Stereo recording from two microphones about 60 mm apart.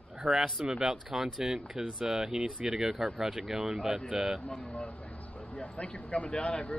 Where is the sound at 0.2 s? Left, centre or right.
Centre.